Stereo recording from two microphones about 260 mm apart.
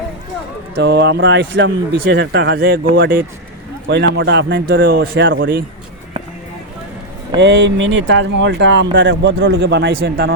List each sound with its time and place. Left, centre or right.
0.8 s speech: right
7.3 s speech: right